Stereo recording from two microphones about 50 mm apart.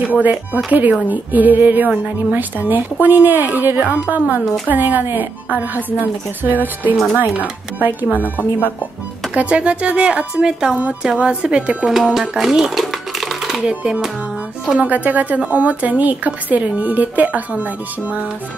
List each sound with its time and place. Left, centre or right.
0.0 s speech: right
8.4 s speech: left
9.3 s speech: right
11.9 s a sound: centre
13.7 s speech: right